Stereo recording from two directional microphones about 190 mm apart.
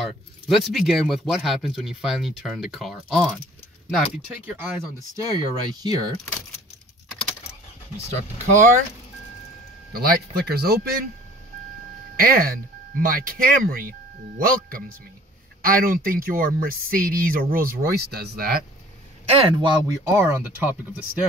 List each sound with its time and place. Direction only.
0.5 s speech: centre (ahead or behind); by 6.1 s 20° right (ahead or behind)
8.5 s speech: 40° right (ahead or behind)
9.9 s speech: 55° right (ahead or behind)
12.2 s speech: 50° right (ahead or behind)
19.2 s speech: 25° right (ahead or behind)